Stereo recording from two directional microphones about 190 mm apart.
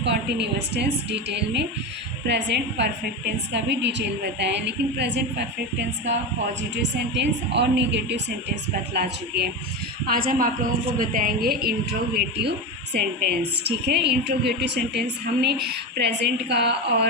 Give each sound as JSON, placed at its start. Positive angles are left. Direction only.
{"t": 0.0, "sound": "a woman's voice", "side_deg": -65}
{"t": 6.6, "sound": "a woman's voice", "side_deg": -65}